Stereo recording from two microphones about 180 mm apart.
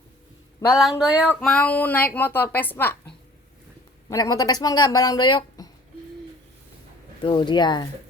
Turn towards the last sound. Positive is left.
turn(degrees=25)  # may be behind; listen again after turning